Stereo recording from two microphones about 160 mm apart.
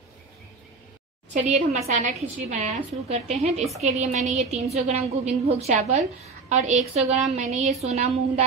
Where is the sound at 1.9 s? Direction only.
45° right (ahead or behind).